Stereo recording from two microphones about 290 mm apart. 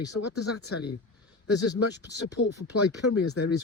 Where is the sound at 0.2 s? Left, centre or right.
Left.